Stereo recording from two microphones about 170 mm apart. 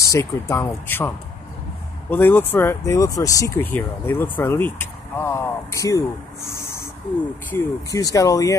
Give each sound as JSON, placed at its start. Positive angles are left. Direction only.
{"t": 0.1, "sound": "speech", "side_deg": 20}